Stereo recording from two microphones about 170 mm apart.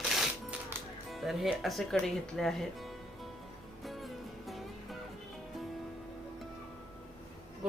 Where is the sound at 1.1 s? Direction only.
Centre (ahead or behind).